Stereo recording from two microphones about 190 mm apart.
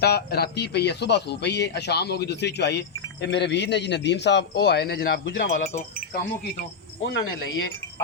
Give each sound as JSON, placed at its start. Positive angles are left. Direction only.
{"t": 0.0, "sound": "speech", "side_deg": 60}
{"t": 6.6, "sound": "cricket", "side_deg": 70}